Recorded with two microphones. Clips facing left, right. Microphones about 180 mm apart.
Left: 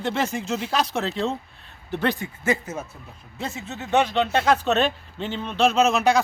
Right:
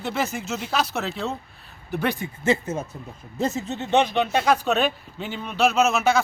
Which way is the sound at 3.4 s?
40° right (ahead or behind).